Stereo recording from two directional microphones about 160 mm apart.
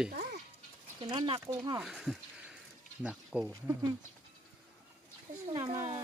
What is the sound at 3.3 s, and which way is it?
Speech, 5° right (ahead or behind).